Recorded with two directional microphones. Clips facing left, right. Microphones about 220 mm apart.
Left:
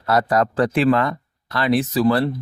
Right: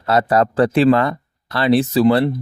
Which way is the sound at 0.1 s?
25° right (ahead or behind).